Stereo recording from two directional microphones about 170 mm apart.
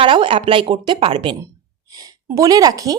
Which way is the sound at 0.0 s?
30° right (ahead or behind).